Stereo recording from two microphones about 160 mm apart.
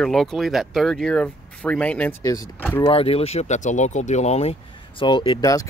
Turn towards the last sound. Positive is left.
turn(degrees=30)  # may be behind; listen again after turning